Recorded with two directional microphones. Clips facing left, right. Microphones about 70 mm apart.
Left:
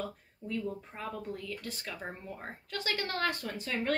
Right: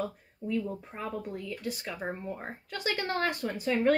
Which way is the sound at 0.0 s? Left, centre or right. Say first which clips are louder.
Right 5 dB; centre.